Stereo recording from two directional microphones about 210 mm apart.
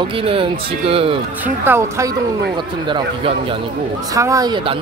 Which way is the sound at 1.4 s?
10° right (ahead or behind).